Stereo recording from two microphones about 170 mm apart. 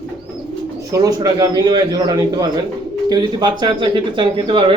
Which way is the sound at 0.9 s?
20° right (ahead or behind).